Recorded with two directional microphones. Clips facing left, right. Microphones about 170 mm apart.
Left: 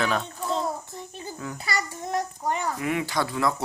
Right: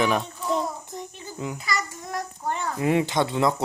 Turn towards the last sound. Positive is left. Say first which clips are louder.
# right 3 dB
turn(degrees=-20)  # may be behind; listen again after turning